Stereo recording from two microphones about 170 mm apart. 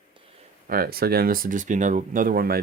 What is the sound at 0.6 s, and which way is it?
Speech, 60° right (ahead or behind).